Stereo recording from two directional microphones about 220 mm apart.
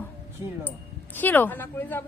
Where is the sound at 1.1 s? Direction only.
10° left (ahead or behind).